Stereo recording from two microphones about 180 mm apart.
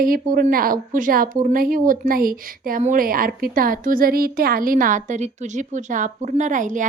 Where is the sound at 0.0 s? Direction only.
50° right (ahead or behind).